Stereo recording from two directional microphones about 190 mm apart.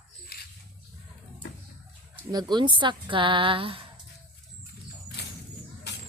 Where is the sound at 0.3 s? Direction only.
55° left (ahead or behind).